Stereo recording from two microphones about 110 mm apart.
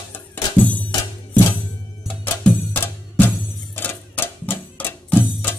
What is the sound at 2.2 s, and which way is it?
Music, 15° left (ahead or behind).